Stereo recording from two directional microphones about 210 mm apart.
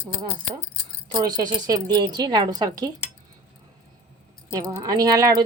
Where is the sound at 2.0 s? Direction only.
20° right (ahead or behind).